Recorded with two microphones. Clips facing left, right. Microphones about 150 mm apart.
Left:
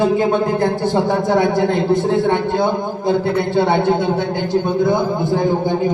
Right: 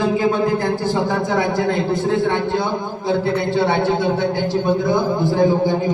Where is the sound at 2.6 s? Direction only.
50° left (ahead or behind).